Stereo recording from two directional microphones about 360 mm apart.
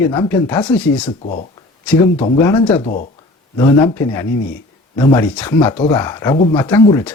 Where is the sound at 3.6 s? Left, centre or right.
Centre.